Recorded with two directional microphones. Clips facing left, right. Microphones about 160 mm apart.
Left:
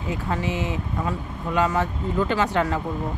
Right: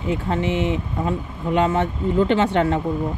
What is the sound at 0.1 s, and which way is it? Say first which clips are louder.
Speech: right 5 dB; 25° right (ahead or behind).